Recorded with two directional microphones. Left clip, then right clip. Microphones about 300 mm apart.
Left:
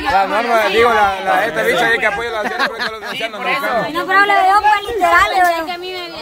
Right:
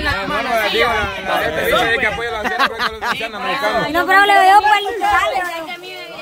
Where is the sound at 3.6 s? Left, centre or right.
Centre; by 4.6 s right.